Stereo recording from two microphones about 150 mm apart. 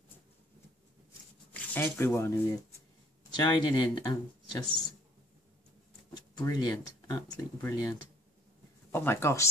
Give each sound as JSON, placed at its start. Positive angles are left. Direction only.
{"t": 1.5, "sound": "speech", "side_deg": 15}
{"t": 3.3, "sound": "speech", "side_deg": 30}
{"t": 6.1, "sound": "speech", "side_deg": 25}
{"t": 8.9, "sound": "speech", "side_deg": 15}